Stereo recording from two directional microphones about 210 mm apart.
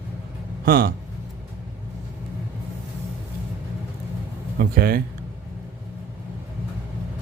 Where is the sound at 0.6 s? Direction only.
45° right (ahead or behind).